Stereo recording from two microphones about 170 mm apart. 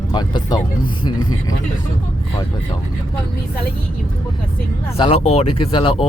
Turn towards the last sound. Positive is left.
turn(degrees=30)  # may be behind; listen again after turning